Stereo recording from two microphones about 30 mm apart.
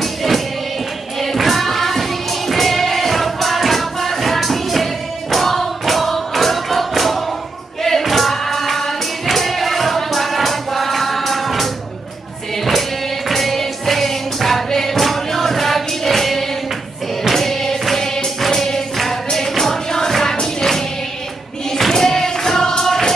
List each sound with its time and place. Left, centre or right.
0.0 s music: centre
13.3 s music: centre